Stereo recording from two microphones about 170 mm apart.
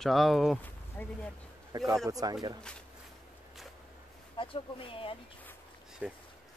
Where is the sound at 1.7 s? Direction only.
20° right (ahead or behind).